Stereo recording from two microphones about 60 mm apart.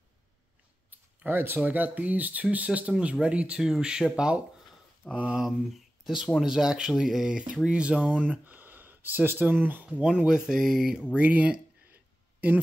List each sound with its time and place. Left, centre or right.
0.8 s a sound: right
1.6 s speech: right
3.5 s speech: centre
5.1 s speech: right
5.4 s speech: centre; by 9.8 s right
9.8 s speech: centre
11.1 s a sound: right